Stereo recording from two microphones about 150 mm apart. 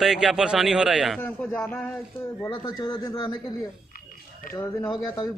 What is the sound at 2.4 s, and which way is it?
Speech, 30° left (ahead or behind).